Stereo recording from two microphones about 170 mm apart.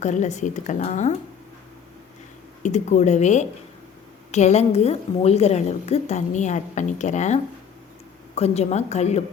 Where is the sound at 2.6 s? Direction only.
45° left (ahead or behind).